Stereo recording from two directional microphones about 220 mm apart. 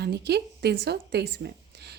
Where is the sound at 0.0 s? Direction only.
50° right (ahead or behind).